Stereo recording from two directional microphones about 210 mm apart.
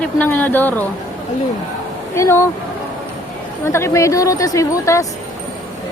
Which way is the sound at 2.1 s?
10° left (ahead or behind).